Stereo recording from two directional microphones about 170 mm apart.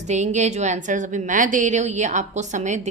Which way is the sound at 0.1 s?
45° right (ahead or behind).